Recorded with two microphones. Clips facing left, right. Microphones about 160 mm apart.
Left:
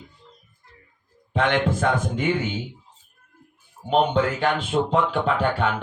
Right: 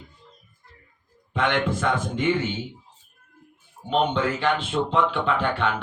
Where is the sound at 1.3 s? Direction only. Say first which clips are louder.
Left 2 dB; 40° left (ahead or behind).